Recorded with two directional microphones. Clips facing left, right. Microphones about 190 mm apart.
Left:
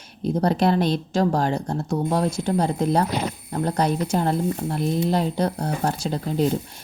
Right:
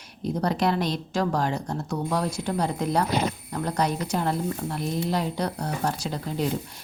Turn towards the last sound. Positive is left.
turn(degrees=30)  # may be behind; listen again after turning